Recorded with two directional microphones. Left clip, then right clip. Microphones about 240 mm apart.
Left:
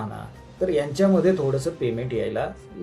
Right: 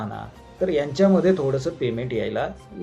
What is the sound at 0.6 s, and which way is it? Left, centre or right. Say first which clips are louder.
Speech: right 1 dB; centre.